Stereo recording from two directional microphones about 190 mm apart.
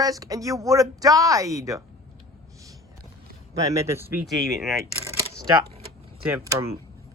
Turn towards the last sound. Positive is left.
turn(degrees=-10)  # may be behind; listen again after turning